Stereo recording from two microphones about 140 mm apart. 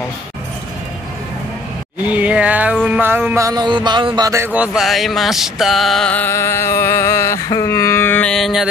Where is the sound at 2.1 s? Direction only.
10° right (ahead or behind).